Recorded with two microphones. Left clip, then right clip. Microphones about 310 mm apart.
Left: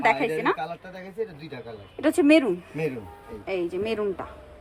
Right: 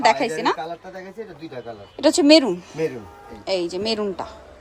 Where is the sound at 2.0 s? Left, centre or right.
Centre.